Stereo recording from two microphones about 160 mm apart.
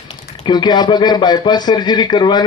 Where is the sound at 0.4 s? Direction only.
25° left (ahead or behind).